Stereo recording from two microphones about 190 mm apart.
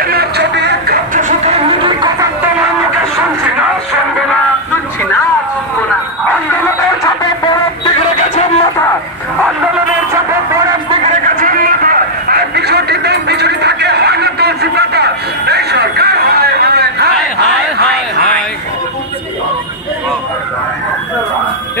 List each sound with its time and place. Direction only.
0.0 s music: 55° right (ahead or behind)
7.8 s music: 35° left (ahead or behind)
10.9 s a sound: 40° right (ahead or behind); by 17.9 s 60° right (ahead or behind)